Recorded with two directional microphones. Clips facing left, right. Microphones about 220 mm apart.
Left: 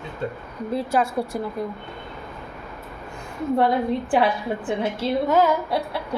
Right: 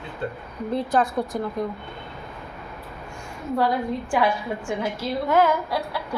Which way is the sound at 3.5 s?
25° left (ahead or behind).